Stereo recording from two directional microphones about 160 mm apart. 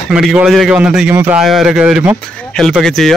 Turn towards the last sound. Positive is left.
turn(degrees=0)  # may be behind; listen again after turning